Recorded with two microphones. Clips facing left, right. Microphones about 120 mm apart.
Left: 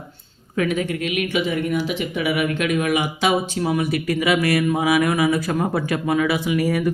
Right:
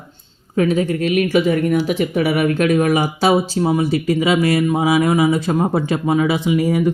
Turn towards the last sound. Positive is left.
turn(degrees=-25)  # may be behind; listen again after turning